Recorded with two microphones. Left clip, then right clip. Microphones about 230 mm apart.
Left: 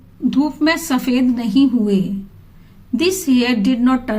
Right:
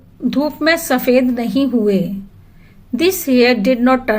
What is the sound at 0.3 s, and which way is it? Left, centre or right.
A woman's voice, centre.